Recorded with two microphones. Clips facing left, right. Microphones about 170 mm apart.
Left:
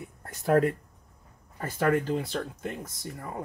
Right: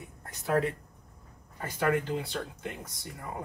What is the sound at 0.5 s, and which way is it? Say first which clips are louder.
Speech: left 5 dB; 50° left (ahead or behind).